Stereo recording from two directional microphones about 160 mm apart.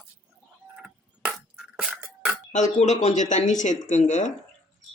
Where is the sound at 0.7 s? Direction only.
5° right (ahead or behind).